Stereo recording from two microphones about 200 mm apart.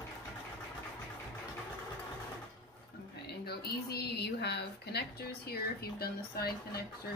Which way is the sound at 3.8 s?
55° left (ahead or behind).